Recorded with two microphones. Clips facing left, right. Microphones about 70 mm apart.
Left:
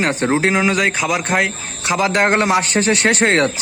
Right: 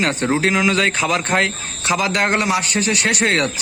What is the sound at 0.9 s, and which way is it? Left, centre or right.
Speech, centre.